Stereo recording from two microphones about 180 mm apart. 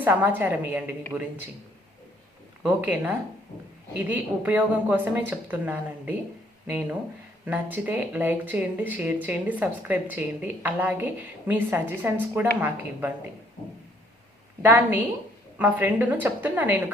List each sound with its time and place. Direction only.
0.0 s speech: 10° right (ahead or behind)
2.6 s speech: 10° right (ahead or behind)
13.6 s a sound: 20° left (ahead or behind)
14.6 s speech: 10° right (ahead or behind)